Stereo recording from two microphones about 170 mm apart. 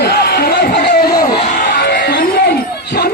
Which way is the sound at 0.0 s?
70° left (ahead or behind).